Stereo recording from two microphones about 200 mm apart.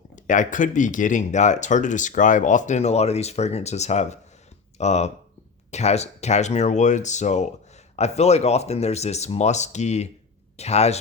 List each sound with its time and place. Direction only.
0.2 s speech: 40° left (ahead or behind)